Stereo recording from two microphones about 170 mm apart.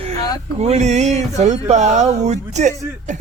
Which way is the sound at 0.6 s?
40° right (ahead or behind).